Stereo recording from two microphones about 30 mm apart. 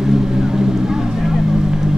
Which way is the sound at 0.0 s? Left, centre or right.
Centre.